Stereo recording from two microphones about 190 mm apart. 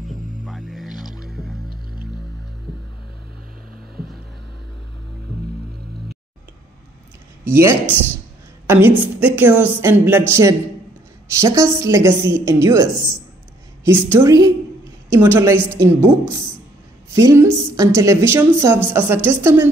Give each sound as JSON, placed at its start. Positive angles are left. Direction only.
{"t": 0.0, "sound": "music", "side_deg": 0}
{"t": 1.7, "sound": "music", "side_deg": -50}
{"t": 3.9, "sound": "music", "side_deg": 0}
{"t": 7.4, "sound": "a woman's voice", "side_deg": -15}